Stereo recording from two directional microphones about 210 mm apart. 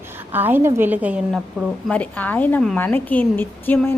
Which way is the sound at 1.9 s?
5° left (ahead or behind).